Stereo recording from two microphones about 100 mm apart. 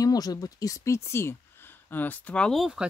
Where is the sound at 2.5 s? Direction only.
5° right (ahead or behind).